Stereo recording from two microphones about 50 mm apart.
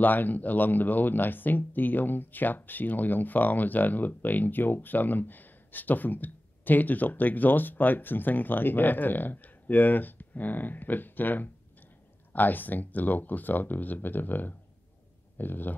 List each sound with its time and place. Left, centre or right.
0.0 s speech: left